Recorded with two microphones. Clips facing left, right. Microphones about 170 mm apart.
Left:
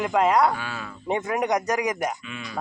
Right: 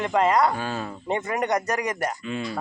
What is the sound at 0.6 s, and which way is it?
Speech, 40° right (ahead or behind).